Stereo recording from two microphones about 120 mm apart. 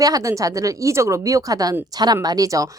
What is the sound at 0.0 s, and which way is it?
A woman's voice, 30° right (ahead or behind).